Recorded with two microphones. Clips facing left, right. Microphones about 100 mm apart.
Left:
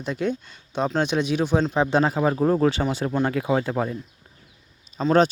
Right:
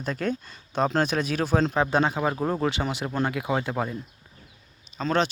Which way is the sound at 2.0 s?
5° left (ahead or behind).